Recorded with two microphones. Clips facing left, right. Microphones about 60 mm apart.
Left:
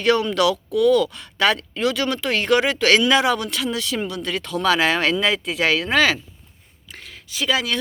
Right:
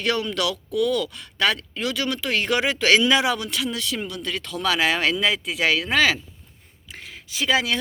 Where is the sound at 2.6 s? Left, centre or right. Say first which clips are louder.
Even; centre.